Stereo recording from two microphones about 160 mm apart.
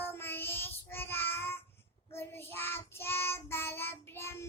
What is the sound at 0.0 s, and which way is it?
Child singing, 15° left (ahead or behind).